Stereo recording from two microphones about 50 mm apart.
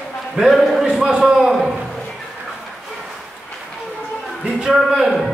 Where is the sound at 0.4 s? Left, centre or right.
Centre.